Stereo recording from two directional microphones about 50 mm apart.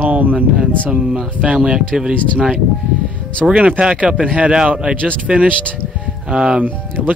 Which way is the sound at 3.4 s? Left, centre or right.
Right.